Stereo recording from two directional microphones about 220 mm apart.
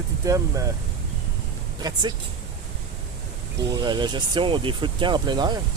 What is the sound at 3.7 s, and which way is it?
Speech, 20° right (ahead or behind).